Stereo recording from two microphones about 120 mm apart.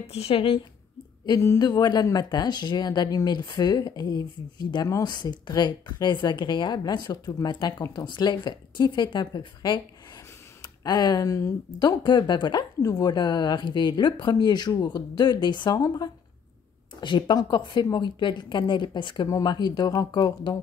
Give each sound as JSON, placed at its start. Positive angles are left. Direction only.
{"t": 0.0, "sound": "a woman's voice", "side_deg": 55}
{"t": 1.2, "sound": "speech", "side_deg": 30}
{"t": 17.0, "sound": "speech", "side_deg": 40}
{"t": 19.2, "sound": "speech", "side_deg": 30}